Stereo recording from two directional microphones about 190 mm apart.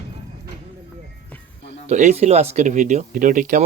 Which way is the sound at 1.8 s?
40° right (ahead or behind).